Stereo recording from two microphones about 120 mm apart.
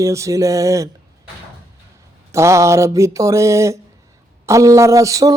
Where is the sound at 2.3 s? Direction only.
25° right (ahead or behind).